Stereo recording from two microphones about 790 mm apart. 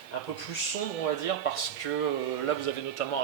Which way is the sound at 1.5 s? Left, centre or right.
Left.